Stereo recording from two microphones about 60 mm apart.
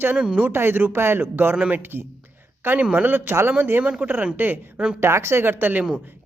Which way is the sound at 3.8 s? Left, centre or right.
Centre.